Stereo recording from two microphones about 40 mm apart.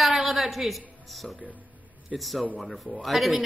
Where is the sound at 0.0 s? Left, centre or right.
Centre.